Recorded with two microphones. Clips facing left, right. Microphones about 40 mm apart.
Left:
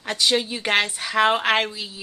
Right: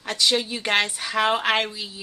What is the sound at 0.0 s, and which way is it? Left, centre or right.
A woman's voice, centre.